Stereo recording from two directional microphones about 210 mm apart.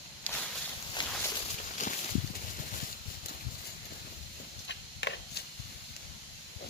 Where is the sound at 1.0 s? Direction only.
20° left (ahead or behind).